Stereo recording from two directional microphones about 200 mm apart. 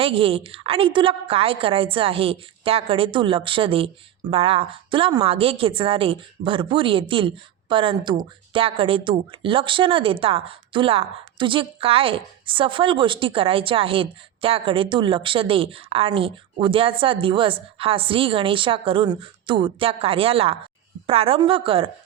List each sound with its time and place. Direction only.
0.0 s speech: 25° right (ahead or behind)